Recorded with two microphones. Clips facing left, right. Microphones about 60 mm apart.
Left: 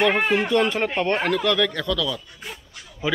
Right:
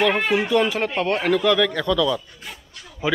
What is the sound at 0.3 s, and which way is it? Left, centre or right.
A man's voice, centre.